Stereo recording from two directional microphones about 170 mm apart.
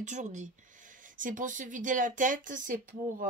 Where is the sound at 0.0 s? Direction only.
45° right (ahead or behind).